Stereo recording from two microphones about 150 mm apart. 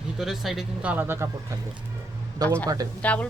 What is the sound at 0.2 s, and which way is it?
A man's voice, centre (ahead or behind).